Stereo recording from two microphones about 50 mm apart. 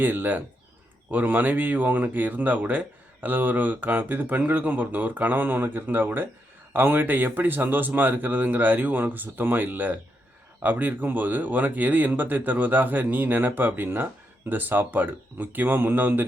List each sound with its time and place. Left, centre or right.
0.0 s speech: right